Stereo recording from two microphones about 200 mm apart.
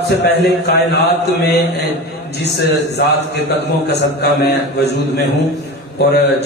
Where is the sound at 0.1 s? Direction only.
55° left (ahead or behind).